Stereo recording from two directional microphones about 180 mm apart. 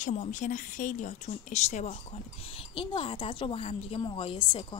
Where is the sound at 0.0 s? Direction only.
45° left (ahead or behind).